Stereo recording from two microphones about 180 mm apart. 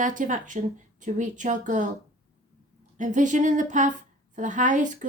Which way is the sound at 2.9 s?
45° right (ahead or behind).